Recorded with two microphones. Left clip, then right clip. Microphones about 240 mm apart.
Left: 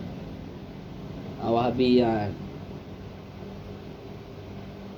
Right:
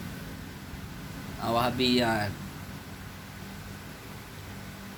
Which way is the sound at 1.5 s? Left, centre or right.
Right.